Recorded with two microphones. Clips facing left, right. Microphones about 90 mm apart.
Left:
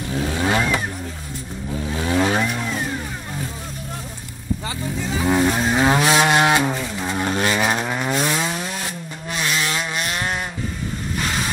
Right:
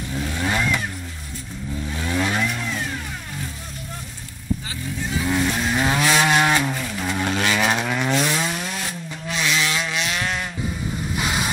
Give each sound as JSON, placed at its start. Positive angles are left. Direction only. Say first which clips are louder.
{"t": 0.2, "sound": "vehicle", "louder": "left 4 dB", "side_deg": 20}
{"t": 0.6, "sound": "vehicle", "louder": "left 2 dB", "side_deg": 35}
{"t": 1.9, "sound": "vehicle", "louder": "left 5 dB", "side_deg": 20}
{"t": 5.2, "sound": "livestock", "louder": "left 5 dB", "side_deg": 35}
{"t": 6.1, "sound": "a sound", "louder": "left 2 dB", "side_deg": 10}
{"t": 6.8, "sound": "vehicle", "louder": "left 1 dB", "side_deg": 15}
{"t": 7.9, "sound": "chainsaw", "louder": "even", "side_deg": 10}
{"t": 9.5, "sound": "vehicle", "louder": "even", "side_deg": 45}
{"t": 11.1, "sound": "vehicle", "louder": "even", "side_deg": -5}